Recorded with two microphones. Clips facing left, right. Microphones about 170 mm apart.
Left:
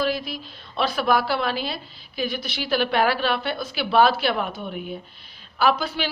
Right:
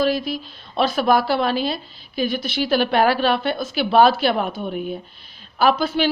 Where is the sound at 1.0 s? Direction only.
25° right (ahead or behind).